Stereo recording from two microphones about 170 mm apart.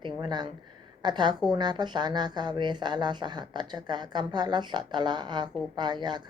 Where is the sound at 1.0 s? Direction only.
25° right (ahead or behind).